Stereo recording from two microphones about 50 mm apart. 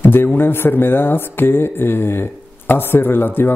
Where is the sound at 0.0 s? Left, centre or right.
Left.